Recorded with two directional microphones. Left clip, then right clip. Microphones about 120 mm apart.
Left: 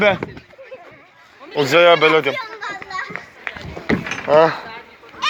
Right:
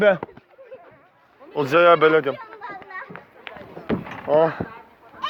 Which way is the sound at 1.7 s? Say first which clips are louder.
Left 3 dB; 60° right (ahead or behind).